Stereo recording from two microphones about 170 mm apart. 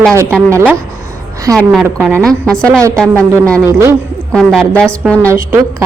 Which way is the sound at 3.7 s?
15° right (ahead or behind).